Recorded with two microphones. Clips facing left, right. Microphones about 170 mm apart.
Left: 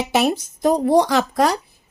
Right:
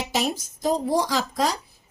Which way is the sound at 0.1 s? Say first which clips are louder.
Left 8 dB; 60° left (ahead or behind).